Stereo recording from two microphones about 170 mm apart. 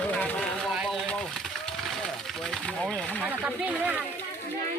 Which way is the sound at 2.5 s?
5° left (ahead or behind).